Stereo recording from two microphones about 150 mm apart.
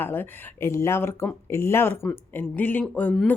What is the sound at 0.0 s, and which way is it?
Speech, 15° left (ahead or behind).